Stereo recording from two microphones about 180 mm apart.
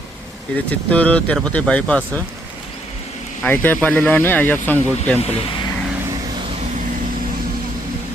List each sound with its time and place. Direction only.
0.7 s speech: 10° left (ahead or behind)
3.4 s speech: 10° left (ahead or behind)